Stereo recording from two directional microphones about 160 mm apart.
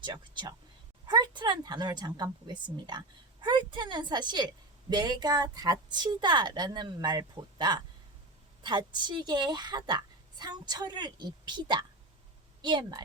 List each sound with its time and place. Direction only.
0.0 s a woman's voice: 25° right (ahead or behind)